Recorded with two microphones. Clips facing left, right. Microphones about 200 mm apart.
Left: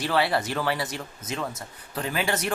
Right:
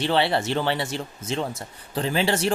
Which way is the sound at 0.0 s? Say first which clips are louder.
Right 2 dB; 25° right (ahead or behind).